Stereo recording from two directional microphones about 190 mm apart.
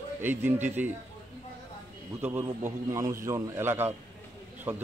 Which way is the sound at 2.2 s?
10° right (ahead or behind).